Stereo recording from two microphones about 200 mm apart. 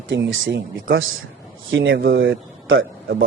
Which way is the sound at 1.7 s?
70° right (ahead or behind).